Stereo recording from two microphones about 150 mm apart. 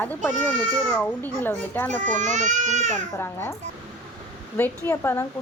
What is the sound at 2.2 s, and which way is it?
Speech, 55° right (ahead or behind).